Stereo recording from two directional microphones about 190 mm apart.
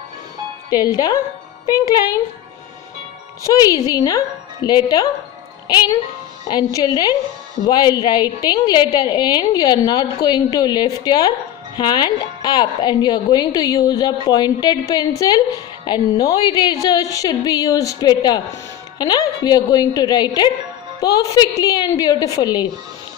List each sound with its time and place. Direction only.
0.9 s a woman's voice: 20° left (ahead or behind)
3.4 s a woman's voice: 20° left (ahead or behind)